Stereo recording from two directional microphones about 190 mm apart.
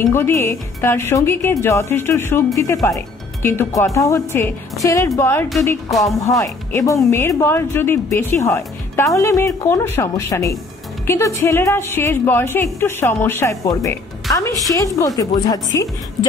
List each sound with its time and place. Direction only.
0.0 s a woman's voice: 10° left (ahead or behind)